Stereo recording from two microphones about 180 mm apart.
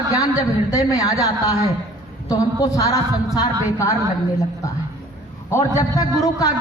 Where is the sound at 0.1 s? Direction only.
20° left (ahead or behind).